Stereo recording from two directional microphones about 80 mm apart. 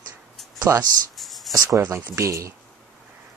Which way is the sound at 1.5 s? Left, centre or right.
Right.